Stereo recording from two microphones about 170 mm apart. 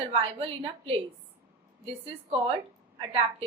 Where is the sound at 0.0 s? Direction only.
35° right (ahead or behind).